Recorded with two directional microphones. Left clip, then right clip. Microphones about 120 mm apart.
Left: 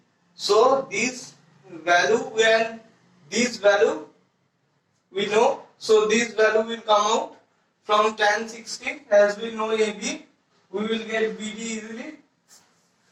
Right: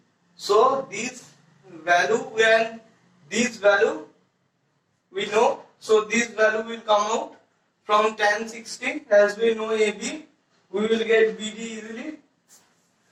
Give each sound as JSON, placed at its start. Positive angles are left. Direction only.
{"t": 0.4, "sound": "a man's voice", "side_deg": 25}
{"t": 5.1, "sound": "a man's voice", "side_deg": 25}